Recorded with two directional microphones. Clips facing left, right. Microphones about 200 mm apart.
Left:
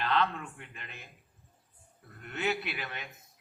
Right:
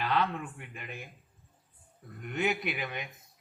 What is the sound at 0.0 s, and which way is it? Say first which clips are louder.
Speech: even; 10° right (ahead or behind).